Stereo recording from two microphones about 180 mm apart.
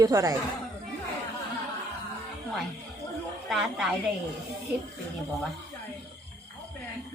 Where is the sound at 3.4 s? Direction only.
Centre (ahead or behind).